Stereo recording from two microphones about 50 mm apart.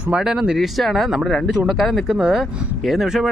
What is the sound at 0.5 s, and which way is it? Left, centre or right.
Speech, centre.